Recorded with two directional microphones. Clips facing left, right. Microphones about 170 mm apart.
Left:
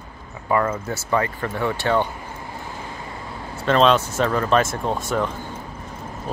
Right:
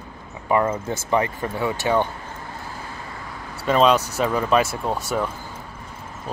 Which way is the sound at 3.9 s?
40° right (ahead or behind).